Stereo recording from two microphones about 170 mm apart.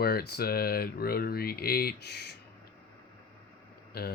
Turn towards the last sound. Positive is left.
turn(degrees=65)  # may be behind; listen again after turning